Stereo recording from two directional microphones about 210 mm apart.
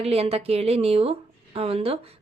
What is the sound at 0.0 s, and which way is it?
A woman's voice, 30° right (ahead or behind).